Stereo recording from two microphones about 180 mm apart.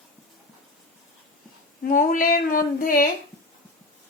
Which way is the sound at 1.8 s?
50° left (ahead or behind).